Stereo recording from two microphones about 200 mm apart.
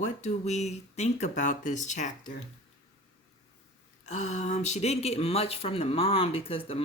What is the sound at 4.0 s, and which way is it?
Speech, 35° left (ahead or behind).